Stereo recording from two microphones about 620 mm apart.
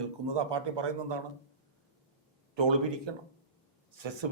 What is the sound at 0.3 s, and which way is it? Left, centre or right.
Speech, right.